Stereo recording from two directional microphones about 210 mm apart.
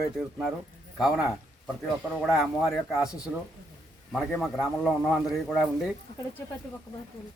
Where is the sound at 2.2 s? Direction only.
Centre (ahead or behind).